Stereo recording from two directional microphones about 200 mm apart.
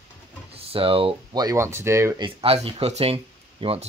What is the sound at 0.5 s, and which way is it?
Speech, 30° right (ahead or behind).